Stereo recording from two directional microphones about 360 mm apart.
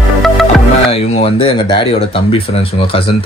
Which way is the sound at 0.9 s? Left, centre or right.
Centre.